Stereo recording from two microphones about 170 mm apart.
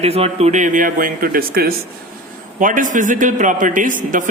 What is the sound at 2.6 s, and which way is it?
A man's voice, 50° right (ahead or behind).